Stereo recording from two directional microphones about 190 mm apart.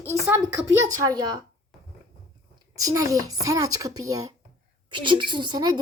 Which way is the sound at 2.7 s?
15° right (ahead or behind).